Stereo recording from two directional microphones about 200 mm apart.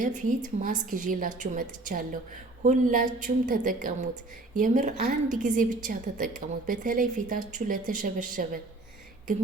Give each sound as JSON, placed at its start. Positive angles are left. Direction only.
{"t": 0.0, "sound": "a woman's voice", "side_deg": -40}